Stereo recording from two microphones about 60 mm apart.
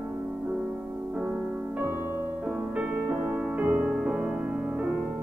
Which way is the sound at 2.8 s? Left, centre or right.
Right.